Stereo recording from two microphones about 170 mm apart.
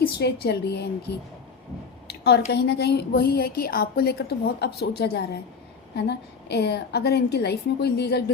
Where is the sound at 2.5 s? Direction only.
75° left (ahead or behind).